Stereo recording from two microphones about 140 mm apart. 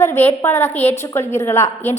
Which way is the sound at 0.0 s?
15° left (ahead or behind).